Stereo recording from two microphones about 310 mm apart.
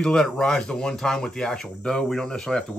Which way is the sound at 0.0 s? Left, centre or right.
Centre.